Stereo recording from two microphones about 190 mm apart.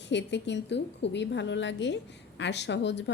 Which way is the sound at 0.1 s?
65° left (ahead or behind).